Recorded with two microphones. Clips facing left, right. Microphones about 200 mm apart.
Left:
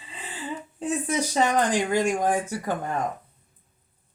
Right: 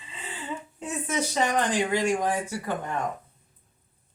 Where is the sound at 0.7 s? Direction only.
35° left (ahead or behind).